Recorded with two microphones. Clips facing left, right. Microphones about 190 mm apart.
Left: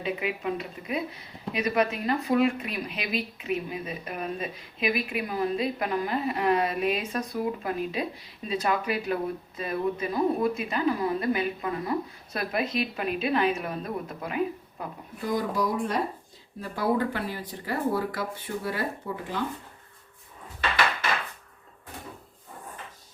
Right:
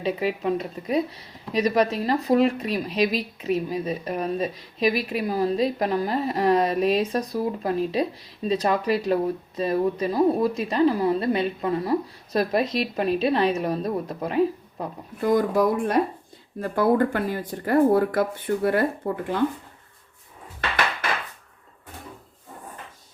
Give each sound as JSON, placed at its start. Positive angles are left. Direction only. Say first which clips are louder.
{"t": 0.0, "sound": "speech", "louder": "right 5 dB", "side_deg": -35}
{"t": 15.2, "sound": "speech", "louder": "right 7 dB", "side_deg": -55}